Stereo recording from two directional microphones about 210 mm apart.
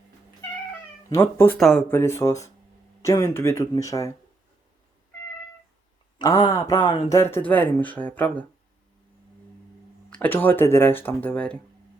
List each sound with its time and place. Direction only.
1.1 s speech: 10° left (ahead or behind)
6.1 s speech: 20° left (ahead or behind)
10.1 s speech: 10° left (ahead or behind)